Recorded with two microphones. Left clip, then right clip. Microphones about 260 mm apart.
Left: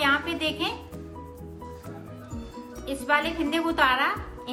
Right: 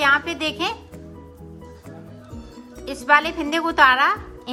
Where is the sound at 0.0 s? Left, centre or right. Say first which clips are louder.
Right 5 dB; centre.